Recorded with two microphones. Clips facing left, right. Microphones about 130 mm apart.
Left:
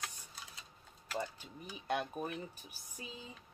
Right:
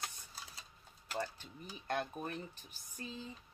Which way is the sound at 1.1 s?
10° left (ahead or behind).